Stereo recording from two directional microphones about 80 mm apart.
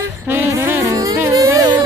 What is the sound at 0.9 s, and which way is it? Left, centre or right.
Music, right.